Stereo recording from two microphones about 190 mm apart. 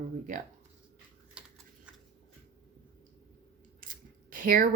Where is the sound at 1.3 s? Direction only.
5° right (ahead or behind).